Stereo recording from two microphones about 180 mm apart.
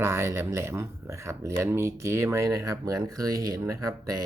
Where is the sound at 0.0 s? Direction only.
15° right (ahead or behind).